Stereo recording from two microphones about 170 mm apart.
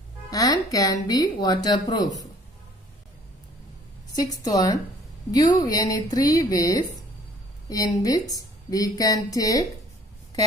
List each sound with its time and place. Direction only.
0.3 s a woman's voice: 20° left (ahead or behind)
4.1 s a woman's voice: 20° left (ahead or behind)